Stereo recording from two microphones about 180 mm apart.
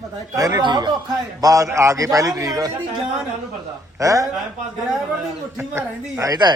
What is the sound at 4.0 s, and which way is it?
Speech, 20° right (ahead or behind).